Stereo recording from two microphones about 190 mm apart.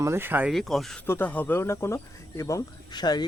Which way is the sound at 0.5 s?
Centre (ahead or behind).